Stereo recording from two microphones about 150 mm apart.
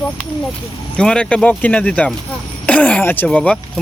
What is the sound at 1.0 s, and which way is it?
Speech, 5° left (ahead or behind).